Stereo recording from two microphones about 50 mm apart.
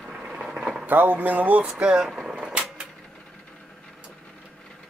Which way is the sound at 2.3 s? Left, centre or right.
Right.